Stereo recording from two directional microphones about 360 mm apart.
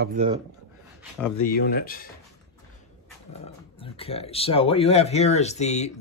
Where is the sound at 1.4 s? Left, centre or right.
Left.